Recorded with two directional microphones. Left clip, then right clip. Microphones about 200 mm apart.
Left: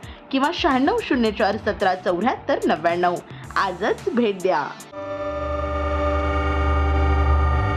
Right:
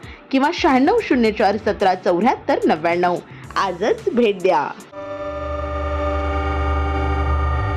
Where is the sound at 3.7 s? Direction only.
Centre (ahead or behind).